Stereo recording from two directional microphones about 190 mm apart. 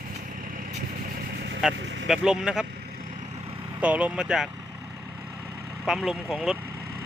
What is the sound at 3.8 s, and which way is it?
Speech, 5° right (ahead or behind).